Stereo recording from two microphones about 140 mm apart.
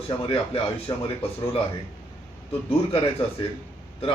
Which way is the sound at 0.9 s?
30° left (ahead or behind).